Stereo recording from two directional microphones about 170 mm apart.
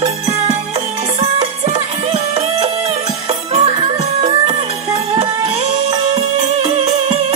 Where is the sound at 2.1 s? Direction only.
35° right (ahead or behind).